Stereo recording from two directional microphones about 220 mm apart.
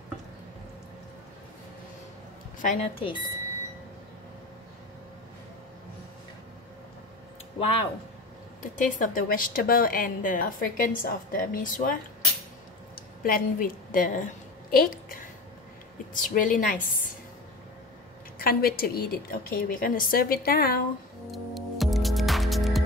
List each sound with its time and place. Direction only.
2.6 s speech: 30° left (ahead or behind)
7.5 s a woman's voice: 25° left (ahead or behind)
18.4 s a woman's voice: 45° left (ahead or behind)
21.3 s music: centre (ahead or behind)